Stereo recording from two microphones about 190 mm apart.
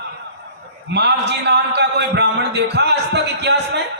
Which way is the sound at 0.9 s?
65° right (ahead or behind).